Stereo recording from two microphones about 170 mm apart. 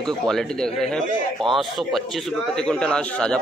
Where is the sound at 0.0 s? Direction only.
Centre (ahead or behind).